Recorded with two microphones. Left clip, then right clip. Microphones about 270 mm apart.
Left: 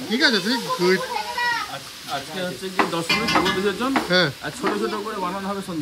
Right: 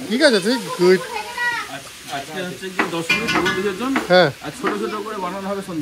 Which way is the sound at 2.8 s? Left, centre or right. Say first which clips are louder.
Right 1 dB; left.